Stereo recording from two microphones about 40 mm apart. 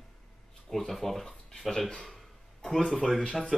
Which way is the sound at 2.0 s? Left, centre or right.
Centre.